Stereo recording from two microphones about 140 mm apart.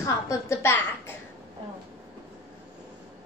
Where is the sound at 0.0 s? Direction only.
20° left (ahead or behind).